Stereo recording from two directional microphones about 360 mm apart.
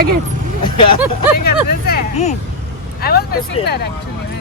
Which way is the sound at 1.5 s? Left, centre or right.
Left.